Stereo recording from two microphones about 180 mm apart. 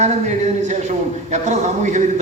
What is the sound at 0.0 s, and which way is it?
A man's voice, 40° right (ahead or behind).